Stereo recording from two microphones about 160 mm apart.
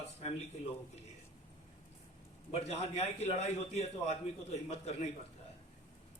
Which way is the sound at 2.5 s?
40° left (ahead or behind).